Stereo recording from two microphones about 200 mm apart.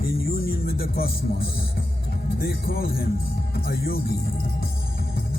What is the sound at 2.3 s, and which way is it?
Speech, 50° left (ahead or behind).